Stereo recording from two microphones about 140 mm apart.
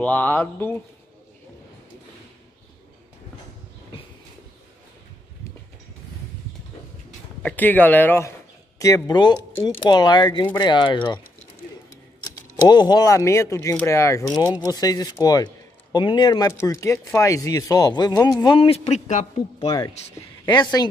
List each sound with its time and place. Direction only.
0.0 s speech: 10° left (ahead or behind)
7.4 s speech: 10° left (ahead or behind); by 11.1 s 35° left (ahead or behind)
12.5 s speech: 30° left (ahead or behind)
18.6 s speech: 50° left (ahead or behind)
19.6 s speech: 25° left (ahead or behind)